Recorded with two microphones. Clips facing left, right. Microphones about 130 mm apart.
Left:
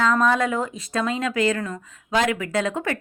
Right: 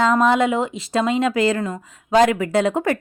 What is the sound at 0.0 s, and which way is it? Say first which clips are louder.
Speech: right 4 dB; 25° right (ahead or behind).